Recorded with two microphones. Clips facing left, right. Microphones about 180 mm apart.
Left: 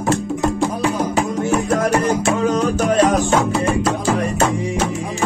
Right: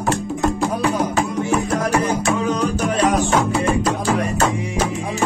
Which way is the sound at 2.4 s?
40° left (ahead or behind).